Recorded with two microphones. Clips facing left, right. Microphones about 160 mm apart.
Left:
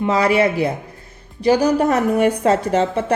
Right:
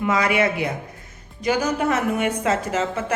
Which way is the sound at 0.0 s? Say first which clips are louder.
Left 4 dB; 30° left (ahead or behind).